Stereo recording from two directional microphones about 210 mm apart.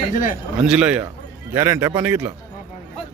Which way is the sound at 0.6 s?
5° right (ahead or behind).